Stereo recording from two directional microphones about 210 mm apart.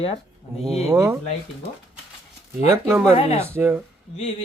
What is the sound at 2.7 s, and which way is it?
Speech, 10° right (ahead or behind).